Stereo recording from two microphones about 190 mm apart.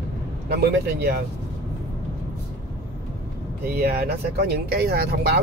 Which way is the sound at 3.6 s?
55° right (ahead or behind).